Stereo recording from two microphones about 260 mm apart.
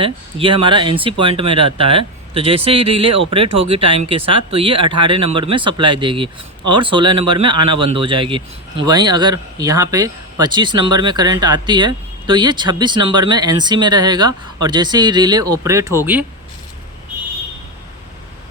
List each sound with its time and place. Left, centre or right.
0.0 s speech: centre